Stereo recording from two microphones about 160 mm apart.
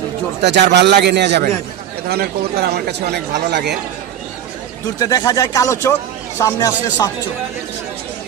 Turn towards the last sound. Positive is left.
turn(degrees=20)  # may be behind; listen again after turning